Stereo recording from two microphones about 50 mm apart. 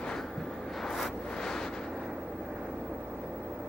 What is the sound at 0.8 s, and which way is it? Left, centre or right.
Vehicle, centre.